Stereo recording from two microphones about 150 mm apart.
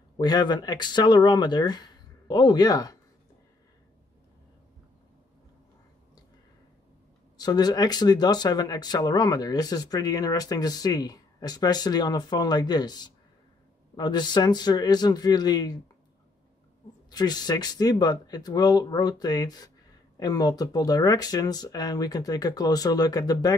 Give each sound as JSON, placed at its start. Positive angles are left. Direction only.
{"t": 0.2, "sound": "speech", "side_deg": 30}
{"t": 7.3, "sound": "speech", "side_deg": 25}
{"t": 17.1, "sound": "speech", "side_deg": 25}